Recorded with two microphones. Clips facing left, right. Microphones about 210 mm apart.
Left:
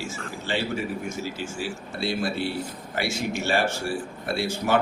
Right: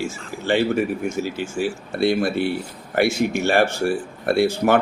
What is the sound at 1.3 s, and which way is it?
Speech, 60° right (ahead or behind).